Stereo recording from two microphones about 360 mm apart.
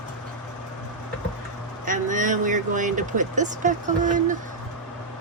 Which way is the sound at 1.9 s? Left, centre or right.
Right.